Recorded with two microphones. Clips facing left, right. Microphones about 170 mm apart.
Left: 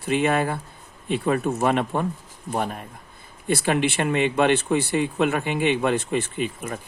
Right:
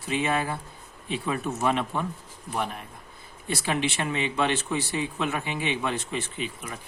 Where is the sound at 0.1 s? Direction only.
55° left (ahead or behind).